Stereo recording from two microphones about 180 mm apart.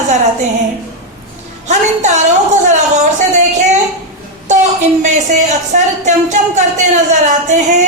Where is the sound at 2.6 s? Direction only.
40° right (ahead or behind).